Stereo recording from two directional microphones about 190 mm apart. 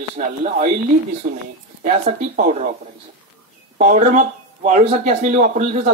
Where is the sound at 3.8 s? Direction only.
40° right (ahead or behind).